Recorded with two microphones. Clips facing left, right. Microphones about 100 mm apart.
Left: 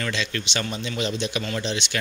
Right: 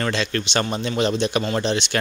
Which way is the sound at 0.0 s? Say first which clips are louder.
Right 5 dB; 45° right (ahead or behind).